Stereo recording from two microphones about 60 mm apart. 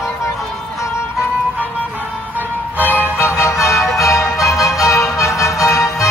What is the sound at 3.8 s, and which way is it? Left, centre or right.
Music, centre.